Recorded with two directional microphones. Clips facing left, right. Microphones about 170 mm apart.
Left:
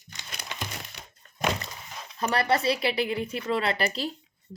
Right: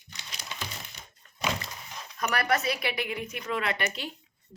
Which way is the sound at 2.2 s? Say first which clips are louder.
Left 3 dB; 30° left (ahead or behind).